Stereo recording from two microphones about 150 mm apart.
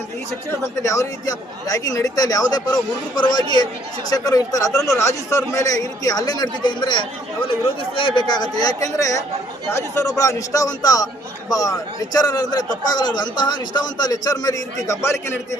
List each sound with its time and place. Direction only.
0.6 s a man's voice: 20° left (ahead or behind)